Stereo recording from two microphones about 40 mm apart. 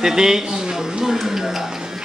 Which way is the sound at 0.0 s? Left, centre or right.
Centre.